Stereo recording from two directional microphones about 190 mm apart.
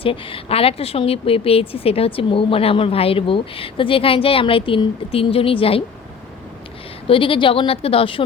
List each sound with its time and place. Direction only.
0.0 s speech: 30° left (ahead or behind)
7.1 s speech: 25° left (ahead or behind)